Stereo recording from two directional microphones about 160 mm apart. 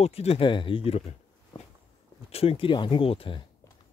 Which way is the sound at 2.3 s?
40° left (ahead or behind).